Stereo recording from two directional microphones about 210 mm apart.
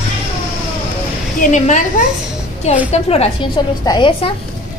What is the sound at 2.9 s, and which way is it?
A woman's voice, 30° left (ahead or behind).